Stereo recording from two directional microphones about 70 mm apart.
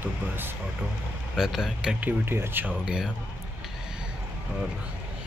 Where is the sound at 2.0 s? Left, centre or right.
Right.